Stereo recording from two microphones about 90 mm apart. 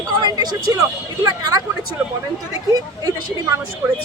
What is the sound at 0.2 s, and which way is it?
Speech, 50° right (ahead or behind).